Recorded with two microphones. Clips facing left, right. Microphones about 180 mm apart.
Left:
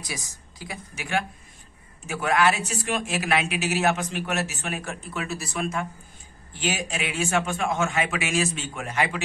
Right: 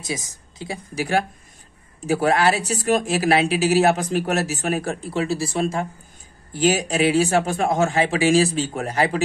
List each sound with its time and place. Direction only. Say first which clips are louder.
0.0 s a woman's voice: right 7 dB; 25° right (ahead or behind)